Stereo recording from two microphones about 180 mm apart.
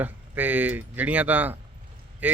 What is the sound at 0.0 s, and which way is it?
Speech, 10° right (ahead or behind).